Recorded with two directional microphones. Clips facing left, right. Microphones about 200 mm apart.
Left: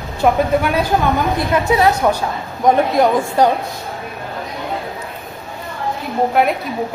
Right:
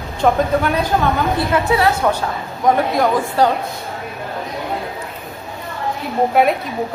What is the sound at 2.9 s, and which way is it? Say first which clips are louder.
Speech: left 2 dB; 15° left (ahead or behind).